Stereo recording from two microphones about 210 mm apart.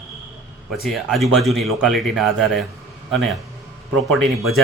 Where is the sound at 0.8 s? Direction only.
Centre (ahead or behind).